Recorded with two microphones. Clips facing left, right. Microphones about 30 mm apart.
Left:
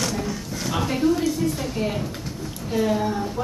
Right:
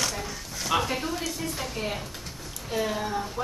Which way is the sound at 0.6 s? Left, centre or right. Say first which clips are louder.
Left 5 dB; centre.